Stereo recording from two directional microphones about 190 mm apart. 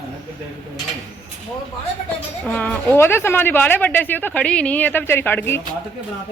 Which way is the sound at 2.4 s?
10° left (ahead or behind).